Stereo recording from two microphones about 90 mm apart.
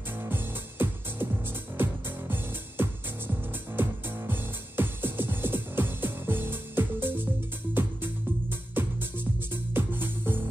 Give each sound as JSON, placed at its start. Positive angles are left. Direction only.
{"t": 0.2, "sound": "music", "side_deg": -25}